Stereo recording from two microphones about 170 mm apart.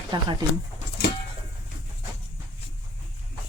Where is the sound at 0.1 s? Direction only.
25° right (ahead or behind).